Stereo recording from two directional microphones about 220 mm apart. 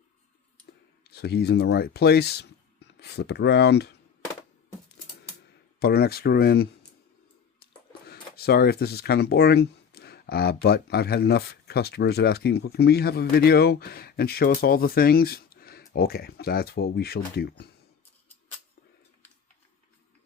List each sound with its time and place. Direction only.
1.0 s speech: 45° left (ahead or behind)
5.8 s speech: 45° left (ahead or behind)
8.0 s speech: 45° left (ahead or behind)